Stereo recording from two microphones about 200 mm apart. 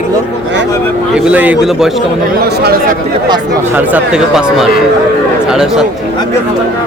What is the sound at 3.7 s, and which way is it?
A man's voice, 10° right (ahead or behind).